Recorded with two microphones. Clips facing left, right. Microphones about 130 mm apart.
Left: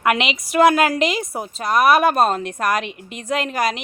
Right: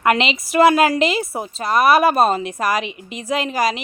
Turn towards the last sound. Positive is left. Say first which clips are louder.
# right 1 dB
turn(degrees=0)  # may be behind; listen again after turning